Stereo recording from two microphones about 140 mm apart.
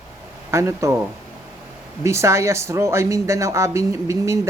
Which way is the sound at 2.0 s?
20° right (ahead or behind).